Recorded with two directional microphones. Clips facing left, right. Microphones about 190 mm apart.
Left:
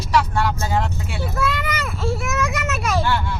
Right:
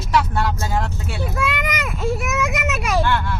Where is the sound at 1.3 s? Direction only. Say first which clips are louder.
Left 1 dB; 10° right (ahead or behind).